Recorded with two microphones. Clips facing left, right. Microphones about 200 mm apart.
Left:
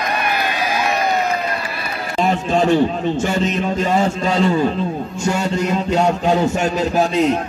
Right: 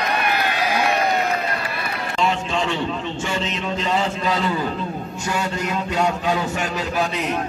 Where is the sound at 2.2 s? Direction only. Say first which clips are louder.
Left 6 dB; 45° left (ahead or behind).